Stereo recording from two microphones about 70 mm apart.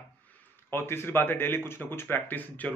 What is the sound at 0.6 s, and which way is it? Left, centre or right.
A man's voice, left.